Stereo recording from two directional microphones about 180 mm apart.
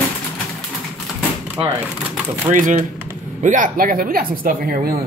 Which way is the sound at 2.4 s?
45° right (ahead or behind).